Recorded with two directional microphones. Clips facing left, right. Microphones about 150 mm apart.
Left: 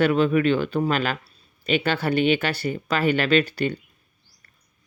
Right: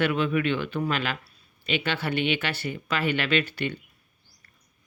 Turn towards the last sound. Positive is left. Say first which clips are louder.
# left 6 dB
turn(degrees=40)  # may be behind; listen again after turning